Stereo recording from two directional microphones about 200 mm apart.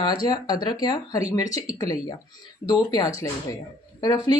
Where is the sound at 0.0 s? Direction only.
20° left (ahead or behind).